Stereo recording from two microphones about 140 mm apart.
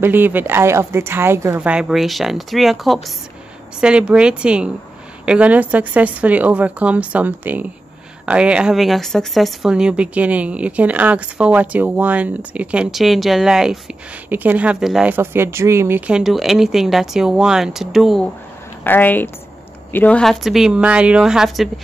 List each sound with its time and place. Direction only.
0.0 s a woman's voice: 15° right (ahead or behind)
1.6 s a woman's voice: 5° right (ahead or behind)
16.1 s speech: 5° right (ahead or behind)
18.9 s a woman's voice: 15° left (ahead or behind); by 21.6 s centre (ahead or behind)